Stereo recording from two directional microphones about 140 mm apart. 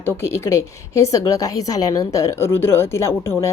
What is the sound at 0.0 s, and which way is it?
A woman's voice, 20° left (ahead or behind).